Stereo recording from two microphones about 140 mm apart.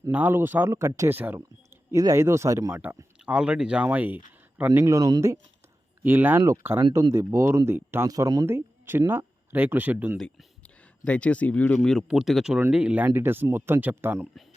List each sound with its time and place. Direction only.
0.1 s speech: 15° right (ahead or behind)
3.2 s speech: 5° right (ahead or behind); by 5.4 s 25° right (ahead or behind)
6.0 s speech: 15° right (ahead or behind)
10.2 s speech: 5° left (ahead or behind)
11.8 s speech: centre (ahead or behind)